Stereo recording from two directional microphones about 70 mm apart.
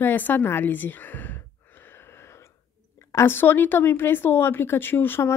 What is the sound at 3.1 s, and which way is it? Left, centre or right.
Speech, left.